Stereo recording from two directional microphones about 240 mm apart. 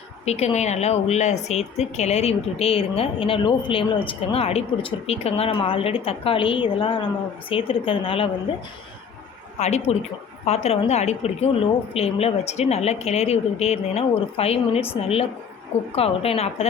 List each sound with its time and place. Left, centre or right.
0.3 s speech: left
9.6 s speech: left